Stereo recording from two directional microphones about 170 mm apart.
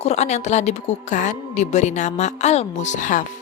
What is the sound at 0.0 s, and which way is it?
A woman's voice, 40° left (ahead or behind).